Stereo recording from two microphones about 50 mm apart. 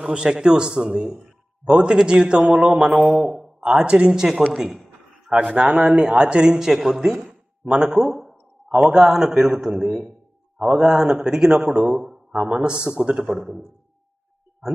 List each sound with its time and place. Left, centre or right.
0.0 s speech: centre
2.6 s mantra: centre
3.3 s a sound: centre
3.8 s speech: centre
10.6 s a man's voice: centre
12.0 s a sound: centre
12.4 s mantra: centre
12.6 s speech: centre